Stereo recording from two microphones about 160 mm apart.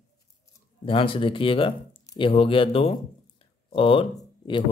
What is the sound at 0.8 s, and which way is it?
Speech, 35° left (ahead or behind).